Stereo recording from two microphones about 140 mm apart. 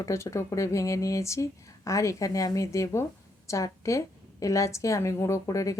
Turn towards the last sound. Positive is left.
turn(degrees=25)  # may be behind; listen again after turning